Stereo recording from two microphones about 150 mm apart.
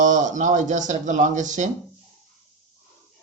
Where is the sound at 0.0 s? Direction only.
55° right (ahead or behind).